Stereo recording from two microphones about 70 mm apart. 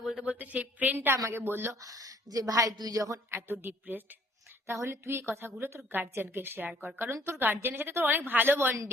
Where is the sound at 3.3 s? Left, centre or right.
Right.